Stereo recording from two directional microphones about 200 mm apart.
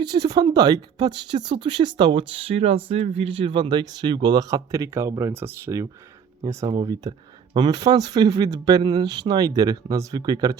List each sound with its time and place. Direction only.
0.0 s speech: 20° right (ahead or behind)